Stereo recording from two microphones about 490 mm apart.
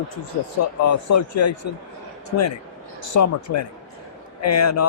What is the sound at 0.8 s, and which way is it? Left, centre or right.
Speech, left.